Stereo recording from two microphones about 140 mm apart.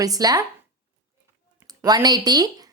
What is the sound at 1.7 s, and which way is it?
Speech, 30° right (ahead or behind).